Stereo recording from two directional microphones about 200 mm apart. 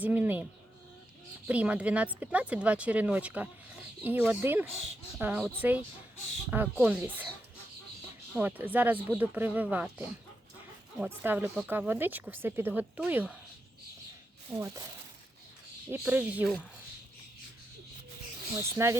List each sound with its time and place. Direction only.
0.0 s speech: 10° right (ahead or behind)
1.5 s speech: 5° right (ahead or behind)
8.4 s speech: 10° right (ahead or behind)
14.5 s speech: 15° right (ahead or behind)
15.9 s speech: 5° right (ahead or behind)
18.5 s speech: 15° right (ahead or behind)